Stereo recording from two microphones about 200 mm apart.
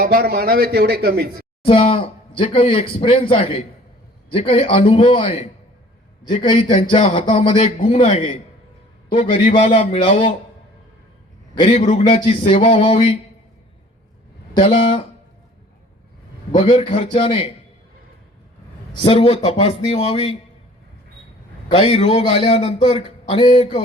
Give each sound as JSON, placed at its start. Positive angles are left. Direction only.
{"t": 0.0, "sound": "a man's voice", "side_deg": -50}
{"t": 1.6, "sound": "speech", "side_deg": 30}
{"t": 9.6, "sound": "a man's voice", "side_deg": 40}
{"t": 9.9, "sound": "speech", "side_deg": 25}
{"t": 11.5, "sound": "speech", "side_deg": 25}
{"t": 14.7, "sound": "speech", "side_deg": 25}
{"t": 16.5, "sound": "speech", "side_deg": 25}
{"t": 19.0, "sound": "speech", "side_deg": 25}
{"t": 21.7, "sound": "speech", "side_deg": 30}